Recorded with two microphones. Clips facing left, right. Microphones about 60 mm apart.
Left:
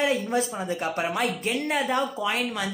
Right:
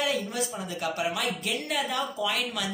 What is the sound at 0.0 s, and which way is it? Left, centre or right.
Speech, left.